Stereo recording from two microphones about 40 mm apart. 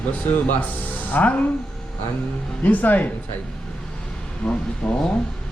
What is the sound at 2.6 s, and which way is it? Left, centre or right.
Speech, left.